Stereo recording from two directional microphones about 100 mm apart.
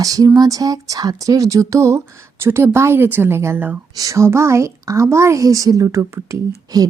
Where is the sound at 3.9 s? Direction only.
35° right (ahead or behind).